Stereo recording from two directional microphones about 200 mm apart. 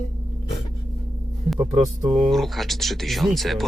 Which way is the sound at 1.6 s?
15° right (ahead or behind).